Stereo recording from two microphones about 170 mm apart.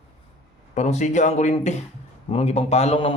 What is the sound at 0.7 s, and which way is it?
Speech, 45° left (ahead or behind).